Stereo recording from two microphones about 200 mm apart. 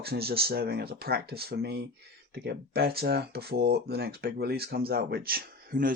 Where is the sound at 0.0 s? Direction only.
50° right (ahead or behind).